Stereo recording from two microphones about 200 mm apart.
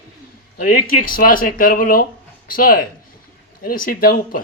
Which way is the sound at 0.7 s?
45° left (ahead or behind).